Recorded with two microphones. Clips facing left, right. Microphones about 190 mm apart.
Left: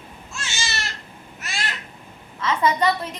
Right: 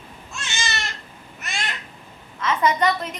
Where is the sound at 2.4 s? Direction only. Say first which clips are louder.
Even; 30° left (ahead or behind).